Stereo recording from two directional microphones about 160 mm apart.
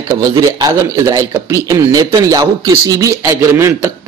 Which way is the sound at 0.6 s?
20° right (ahead or behind).